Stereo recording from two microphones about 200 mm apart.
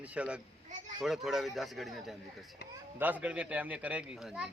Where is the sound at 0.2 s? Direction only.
5° right (ahead or behind).